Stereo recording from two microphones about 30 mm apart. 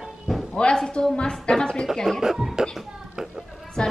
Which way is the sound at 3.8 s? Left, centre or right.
Left.